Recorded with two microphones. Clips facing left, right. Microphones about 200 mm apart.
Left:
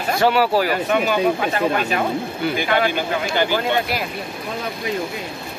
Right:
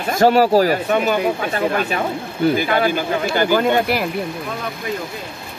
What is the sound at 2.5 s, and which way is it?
Speech, 40° right (ahead or behind).